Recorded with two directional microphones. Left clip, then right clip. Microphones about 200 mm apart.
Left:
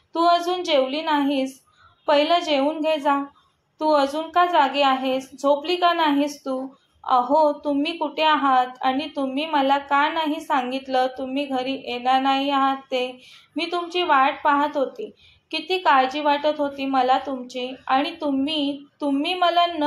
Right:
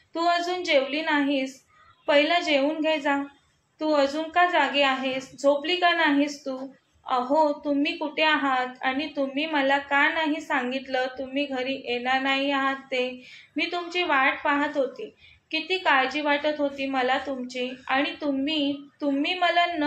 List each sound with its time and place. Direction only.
0.1 s a woman's voice: 25° left (ahead or behind)